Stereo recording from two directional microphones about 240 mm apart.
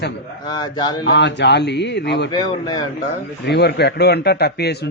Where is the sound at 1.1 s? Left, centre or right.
Left.